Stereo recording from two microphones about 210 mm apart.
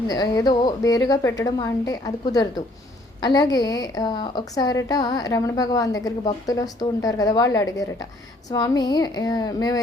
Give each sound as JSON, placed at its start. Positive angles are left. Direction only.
{"t": 0.1, "sound": "a woman's voice", "side_deg": 20}